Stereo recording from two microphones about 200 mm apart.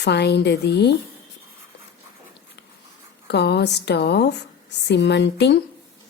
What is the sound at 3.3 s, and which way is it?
A woman's voice, 55° left (ahead or behind).